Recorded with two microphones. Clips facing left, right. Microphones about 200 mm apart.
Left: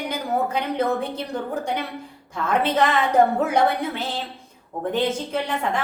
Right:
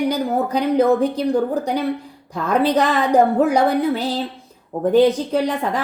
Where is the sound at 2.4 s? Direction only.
35° right (ahead or behind).